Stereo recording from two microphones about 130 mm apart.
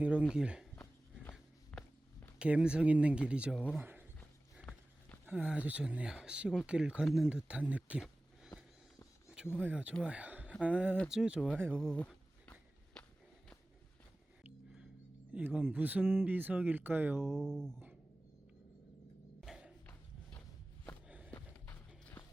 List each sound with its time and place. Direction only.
0.0 s speech: 10° right (ahead or behind)
1.2 s a sound: 10° left (ahead or behind)
2.4 s speech: 10° right (ahead or behind)
5.2 s speech: 10° right (ahead or behind)
10.0 s a sound: 10° right (ahead or behind)
10.6 s speech: 10° right (ahead or behind)
11.8 s walk: 5° left (ahead or behind)
15.4 s speech: 15° right (ahead or behind)
17.2 s speech: 5° left (ahead or behind)
19.4 s music: 5° right (ahead or behind)
21.3 s clip-clop: 15° left (ahead or behind)